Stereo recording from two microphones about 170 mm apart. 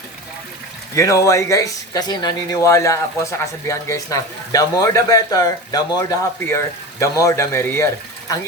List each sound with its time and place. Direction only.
0.9 s a man's voice: 20° left (ahead or behind)